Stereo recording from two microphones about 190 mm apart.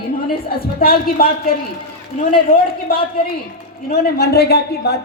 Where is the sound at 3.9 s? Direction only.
55° left (ahead or behind).